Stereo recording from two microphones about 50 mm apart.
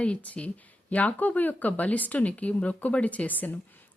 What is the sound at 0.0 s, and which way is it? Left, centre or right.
Speech, left.